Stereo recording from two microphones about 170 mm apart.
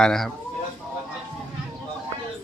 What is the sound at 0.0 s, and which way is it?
Speech, 5° left (ahead or behind).